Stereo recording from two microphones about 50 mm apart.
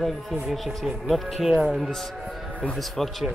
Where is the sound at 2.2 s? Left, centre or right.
Centre.